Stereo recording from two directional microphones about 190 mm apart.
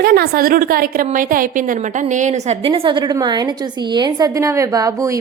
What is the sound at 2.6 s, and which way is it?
A woman's voice, 30° right (ahead or behind).